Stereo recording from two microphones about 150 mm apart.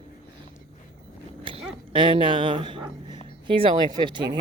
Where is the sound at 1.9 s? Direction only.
35° right (ahead or behind).